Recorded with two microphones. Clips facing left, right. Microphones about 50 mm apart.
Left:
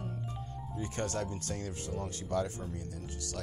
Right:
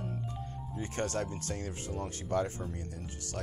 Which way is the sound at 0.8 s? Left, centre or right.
Right.